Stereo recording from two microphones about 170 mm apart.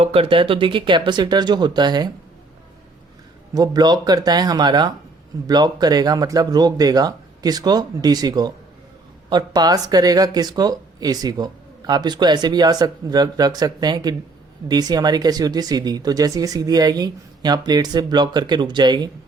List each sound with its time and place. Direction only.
0.0 s speech: 35° right (ahead or behind)
3.5 s speech: 20° right (ahead or behind)